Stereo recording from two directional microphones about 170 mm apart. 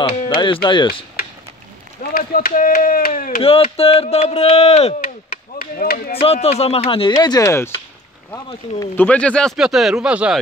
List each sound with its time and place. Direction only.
0.1 s speech: 30° left (ahead or behind)
2.0 s speech: 55° left (ahead or behind)
3.4 s speech: 35° left (ahead or behind)
5.6 s speech: 60° left (ahead or behind)
6.1 s speech: 35° left (ahead or behind); by 7.7 s 15° left (ahead or behind)
8.9 s speech: 10° left (ahead or behind)